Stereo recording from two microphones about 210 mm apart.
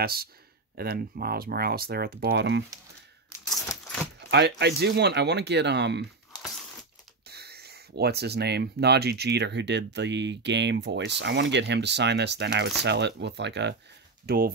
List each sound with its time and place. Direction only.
0.0 s speech: 45° right (ahead or behind)
3.4 s a sound: centre (ahead or behind)
4.3 s speech: 55° right (ahead or behind)
7.2 s speech: 50° right (ahead or behind)